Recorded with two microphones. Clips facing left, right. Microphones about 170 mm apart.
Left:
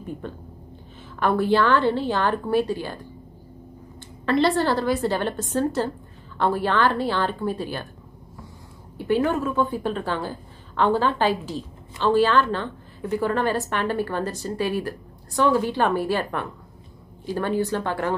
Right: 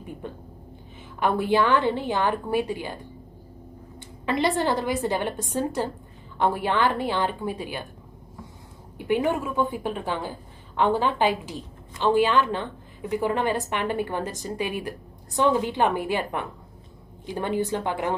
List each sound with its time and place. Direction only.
0.2 s a woman's voice: 15° right (ahead or behind)
4.3 s a woman's voice: 20° right (ahead or behind)
8.9 s a woman's voice: 15° right (ahead or behind)